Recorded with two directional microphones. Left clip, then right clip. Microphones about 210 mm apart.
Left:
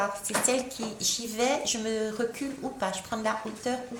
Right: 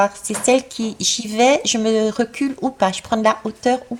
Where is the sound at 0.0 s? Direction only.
40° right (ahead or behind).